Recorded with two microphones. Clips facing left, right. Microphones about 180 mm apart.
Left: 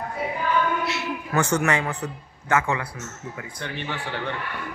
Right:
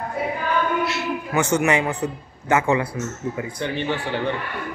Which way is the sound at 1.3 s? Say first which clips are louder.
Right 3 dB; 20° right (ahead or behind).